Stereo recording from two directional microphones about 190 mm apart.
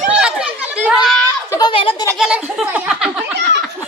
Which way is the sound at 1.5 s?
25° left (ahead or behind).